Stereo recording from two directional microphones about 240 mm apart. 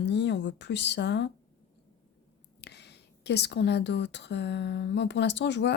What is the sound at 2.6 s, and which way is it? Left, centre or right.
Speech, left.